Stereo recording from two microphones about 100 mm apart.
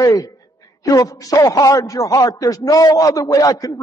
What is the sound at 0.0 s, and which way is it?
A man's voice, 35° left (ahead or behind).